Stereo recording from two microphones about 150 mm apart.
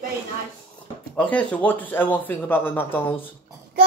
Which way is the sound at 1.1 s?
10° left (ahead or behind).